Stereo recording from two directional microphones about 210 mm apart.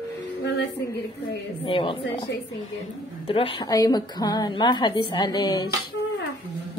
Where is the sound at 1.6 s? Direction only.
25° left (ahead or behind).